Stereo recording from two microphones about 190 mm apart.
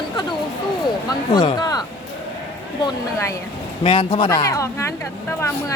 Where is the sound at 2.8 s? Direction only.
15° left (ahead or behind).